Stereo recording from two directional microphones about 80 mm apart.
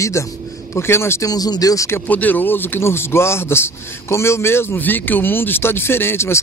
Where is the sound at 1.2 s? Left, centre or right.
Left.